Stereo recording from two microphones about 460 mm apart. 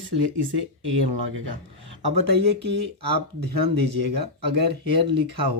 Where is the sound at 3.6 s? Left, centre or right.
Right.